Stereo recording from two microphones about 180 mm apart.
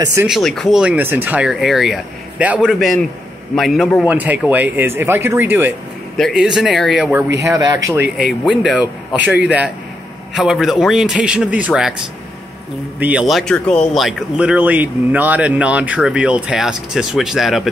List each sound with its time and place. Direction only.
0.0 s speech: 15° right (ahead or behind)
0.3 s speech: centre (ahead or behind)
7.3 s speech: 20° right (ahead or behind)
8.2 s speech: 5° right (ahead or behind)
13.3 s speech: 5° left (ahead or behind)